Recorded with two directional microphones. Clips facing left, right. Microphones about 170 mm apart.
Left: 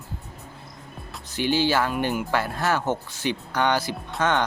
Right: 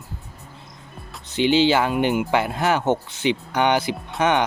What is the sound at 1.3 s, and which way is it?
Speech, 20° right (ahead or behind).